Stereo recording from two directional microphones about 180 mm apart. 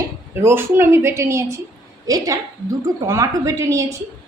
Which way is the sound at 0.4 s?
15° right (ahead or behind).